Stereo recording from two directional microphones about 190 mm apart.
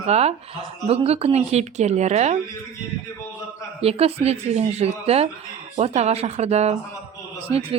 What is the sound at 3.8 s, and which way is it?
Speech, 30° right (ahead or behind).